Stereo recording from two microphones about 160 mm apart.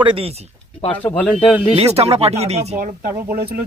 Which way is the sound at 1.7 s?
40° right (ahead or behind).